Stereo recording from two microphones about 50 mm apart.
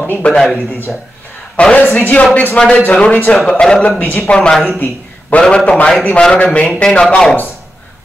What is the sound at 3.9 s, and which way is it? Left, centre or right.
Speech, left.